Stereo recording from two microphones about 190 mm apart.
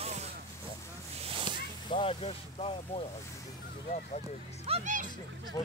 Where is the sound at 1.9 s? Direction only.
30° left (ahead or behind).